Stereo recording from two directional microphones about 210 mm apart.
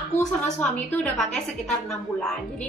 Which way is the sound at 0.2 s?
5° left (ahead or behind).